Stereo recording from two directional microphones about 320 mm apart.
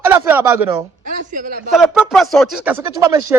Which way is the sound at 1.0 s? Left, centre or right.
Right.